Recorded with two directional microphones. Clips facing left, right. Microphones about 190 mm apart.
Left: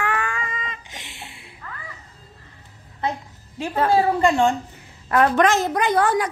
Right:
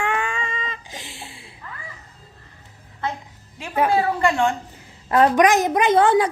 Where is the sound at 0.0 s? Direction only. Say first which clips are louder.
Right 1 dB; 25° right (ahead or behind).